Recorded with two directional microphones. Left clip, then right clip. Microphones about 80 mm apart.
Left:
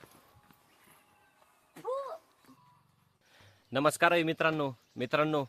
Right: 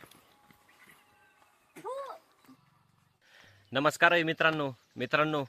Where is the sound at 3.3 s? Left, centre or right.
Left.